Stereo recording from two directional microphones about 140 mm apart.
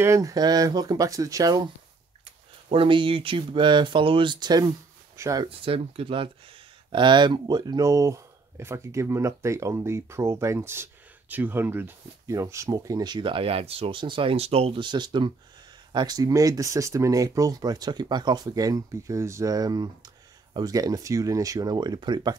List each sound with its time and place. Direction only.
0.0 s speech: 20° right (ahead or behind)
2.7 s speech: 40° right (ahead or behind)
5.4 s speech: 40° right (ahead or behind)